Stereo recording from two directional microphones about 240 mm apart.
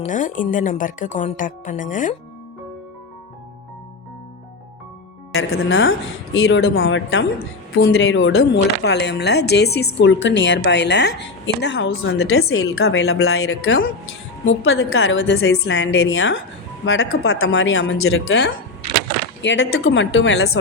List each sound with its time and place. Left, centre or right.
0.0 s speech: left
5.3 s speech: left
12.5 s speech: left
13.1 s a woman's voice: left